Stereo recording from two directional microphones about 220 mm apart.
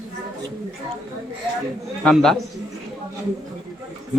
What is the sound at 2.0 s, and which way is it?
Speech, centre (ahead or behind).